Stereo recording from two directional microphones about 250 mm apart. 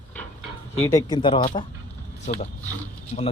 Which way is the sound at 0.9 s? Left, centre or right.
Centre.